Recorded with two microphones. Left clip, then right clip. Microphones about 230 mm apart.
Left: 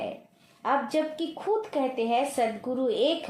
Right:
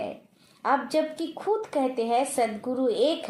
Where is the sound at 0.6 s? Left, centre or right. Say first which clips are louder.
Right 2 dB; right.